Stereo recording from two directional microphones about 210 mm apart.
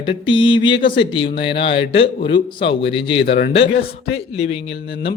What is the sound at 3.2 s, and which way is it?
Speech, 45° left (ahead or behind).